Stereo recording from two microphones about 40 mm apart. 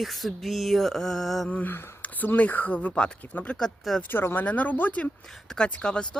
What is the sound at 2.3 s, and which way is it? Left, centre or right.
Speech, left.